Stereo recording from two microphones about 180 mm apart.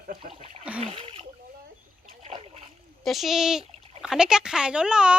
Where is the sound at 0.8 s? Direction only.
30° right (ahead or behind).